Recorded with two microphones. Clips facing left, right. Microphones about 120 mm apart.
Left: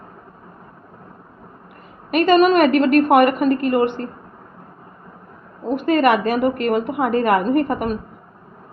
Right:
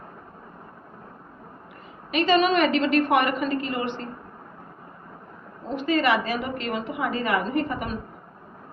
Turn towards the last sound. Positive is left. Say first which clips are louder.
# left 8 dB
turn(degrees=50)  # may be behind; listen again after turning